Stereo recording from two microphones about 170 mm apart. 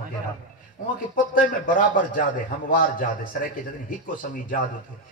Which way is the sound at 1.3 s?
50° left (ahead or behind).